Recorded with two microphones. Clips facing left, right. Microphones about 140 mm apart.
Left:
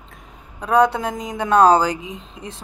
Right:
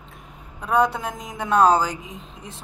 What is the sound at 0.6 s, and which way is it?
Speech, centre (ahead or behind).